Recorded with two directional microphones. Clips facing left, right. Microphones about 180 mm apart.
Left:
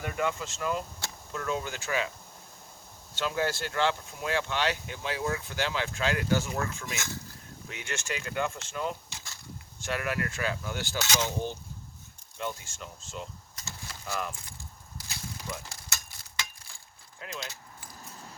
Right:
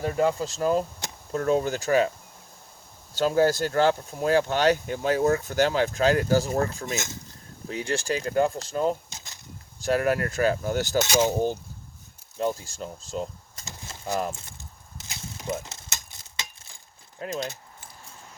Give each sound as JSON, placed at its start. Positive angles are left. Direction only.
{"t": 0.0, "sound": "speech", "side_deg": -35}
{"t": 3.2, "sound": "speech", "side_deg": -40}
{"t": 14.3, "sound": "a sound", "side_deg": -25}
{"t": 16.4, "sound": "keys jangling", "side_deg": -20}
{"t": 17.2, "sound": "speech", "side_deg": -45}